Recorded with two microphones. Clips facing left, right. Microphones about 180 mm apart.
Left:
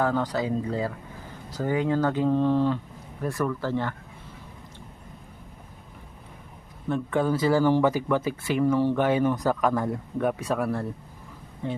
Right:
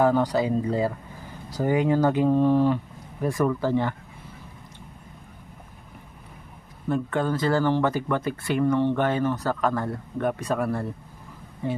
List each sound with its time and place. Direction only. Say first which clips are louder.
0.0 s speech: right 4 dB; 15° right (ahead or behind)
6.8 s speech: even; centre (ahead or behind)